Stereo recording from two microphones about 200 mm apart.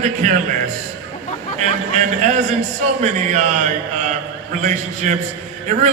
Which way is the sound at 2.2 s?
35° right (ahead or behind).